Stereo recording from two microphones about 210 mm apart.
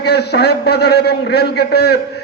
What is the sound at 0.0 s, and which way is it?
A man's voice, 50° left (ahead or behind).